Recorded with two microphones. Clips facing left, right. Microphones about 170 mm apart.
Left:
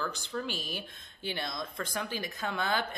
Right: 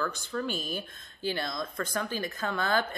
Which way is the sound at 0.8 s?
20° left (ahead or behind).